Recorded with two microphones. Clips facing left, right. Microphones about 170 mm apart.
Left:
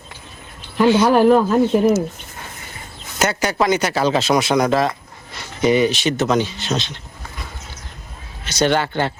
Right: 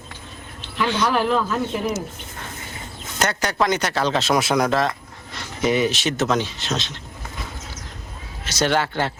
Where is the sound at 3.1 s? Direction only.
5° left (ahead or behind).